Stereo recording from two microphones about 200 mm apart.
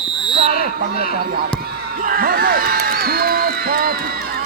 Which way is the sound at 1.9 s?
45° right (ahead or behind).